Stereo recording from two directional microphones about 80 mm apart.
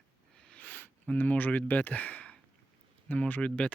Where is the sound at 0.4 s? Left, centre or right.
Centre.